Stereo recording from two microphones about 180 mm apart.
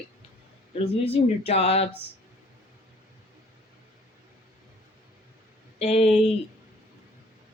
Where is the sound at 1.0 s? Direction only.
35° left (ahead or behind).